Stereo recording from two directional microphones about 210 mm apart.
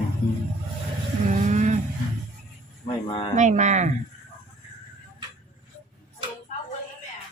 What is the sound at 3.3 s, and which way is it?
Speech, 35° right (ahead or behind).